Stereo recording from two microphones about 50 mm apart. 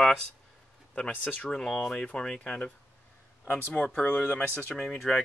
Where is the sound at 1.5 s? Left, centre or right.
Centre.